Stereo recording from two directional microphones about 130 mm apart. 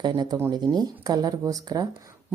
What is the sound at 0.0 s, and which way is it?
A woman's voice, 35° right (ahead or behind).